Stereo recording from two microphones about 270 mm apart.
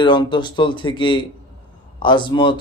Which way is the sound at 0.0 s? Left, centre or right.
Centre.